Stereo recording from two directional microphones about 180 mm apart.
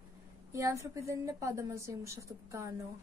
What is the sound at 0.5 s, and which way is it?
Speech, 15° right (ahead or behind).